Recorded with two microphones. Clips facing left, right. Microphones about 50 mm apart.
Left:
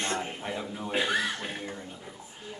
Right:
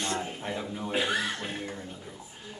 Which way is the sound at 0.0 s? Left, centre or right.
Left.